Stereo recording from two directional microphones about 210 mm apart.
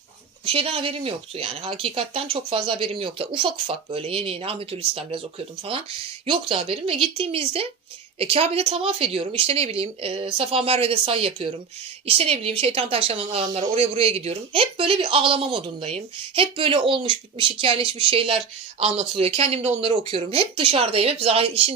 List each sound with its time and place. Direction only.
0.4 s speech: 25° right (ahead or behind)